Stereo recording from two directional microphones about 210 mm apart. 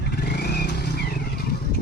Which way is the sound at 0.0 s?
50° left (ahead or behind).